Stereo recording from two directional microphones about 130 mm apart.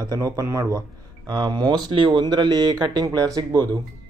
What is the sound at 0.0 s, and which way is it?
Speech, 25° right (ahead or behind).